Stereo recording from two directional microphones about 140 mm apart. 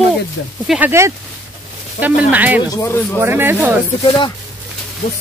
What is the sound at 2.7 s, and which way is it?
Speech, 15° left (ahead or behind).